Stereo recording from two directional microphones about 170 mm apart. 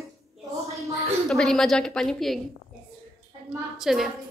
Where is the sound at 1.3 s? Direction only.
Centre (ahead or behind).